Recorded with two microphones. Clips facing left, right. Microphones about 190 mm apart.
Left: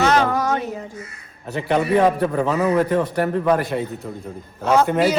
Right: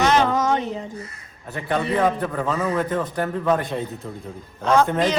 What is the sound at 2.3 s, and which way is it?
Speech, 15° left (ahead or behind).